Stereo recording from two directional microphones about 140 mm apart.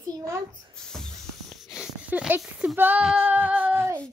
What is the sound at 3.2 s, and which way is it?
Humming, 15° right (ahead or behind).